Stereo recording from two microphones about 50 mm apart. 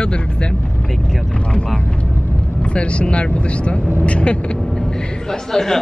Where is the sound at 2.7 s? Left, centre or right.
Left.